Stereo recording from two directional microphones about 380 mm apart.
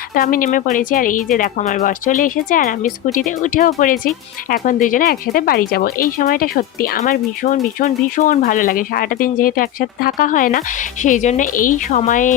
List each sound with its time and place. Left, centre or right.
0.1 s speech: left